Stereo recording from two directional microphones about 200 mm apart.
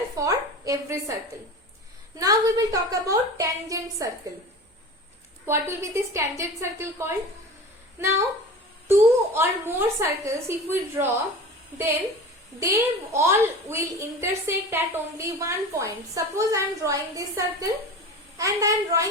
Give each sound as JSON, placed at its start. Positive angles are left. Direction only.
{"t": 0.2, "sound": "a sound", "side_deg": -15}
{"t": 2.1, "sound": "a woman's voice", "side_deg": -15}
{"t": 5.5, "sound": "a woman's voice", "side_deg": -15}
{"t": 8.9, "sound": "a woman's voice", "side_deg": -10}
{"t": 12.5, "sound": "a woman's voice", "side_deg": -15}